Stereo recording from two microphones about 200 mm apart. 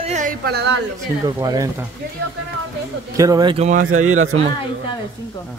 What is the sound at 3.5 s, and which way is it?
Speech, 35° right (ahead or behind).